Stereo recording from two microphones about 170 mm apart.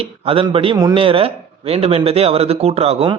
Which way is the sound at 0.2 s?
35° right (ahead or behind).